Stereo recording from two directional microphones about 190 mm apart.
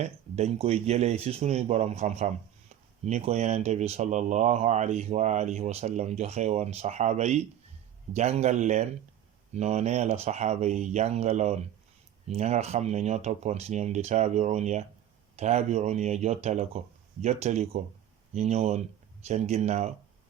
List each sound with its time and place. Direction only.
0.0 s speech: 35° right (ahead or behind)